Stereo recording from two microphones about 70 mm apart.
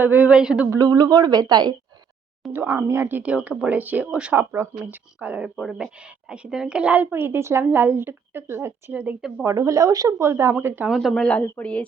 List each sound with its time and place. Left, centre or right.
0.0 s speech: right
0.3 s a woman's voice: centre
0.8 s speech: right
2.5 s a woman's voice: right
3.1 s speech: right
4.4 s speech: right
4.9 s a woman's voice: centre
8.9 s speech: right
9.6 s speech: right
10.8 s speech: centre
11.1 s a woman's voice: centre